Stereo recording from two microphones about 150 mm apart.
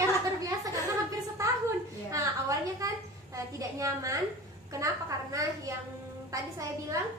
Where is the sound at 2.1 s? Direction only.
20° right (ahead or behind).